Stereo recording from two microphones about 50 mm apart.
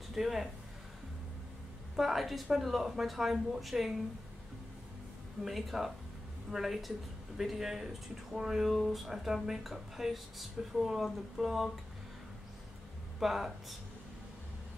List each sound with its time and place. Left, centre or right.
0.1 s speech: centre
2.0 s speech: centre
5.4 s speech: centre
13.2 s speech: centre